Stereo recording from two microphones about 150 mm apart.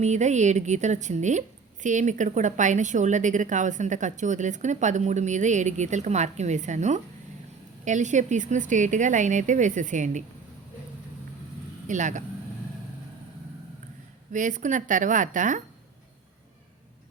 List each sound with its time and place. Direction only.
0.0 s a woman's voice: 50° right (ahead or behind)
11.9 s speech: 55° right (ahead or behind)
14.3 s speech: 55° right (ahead or behind)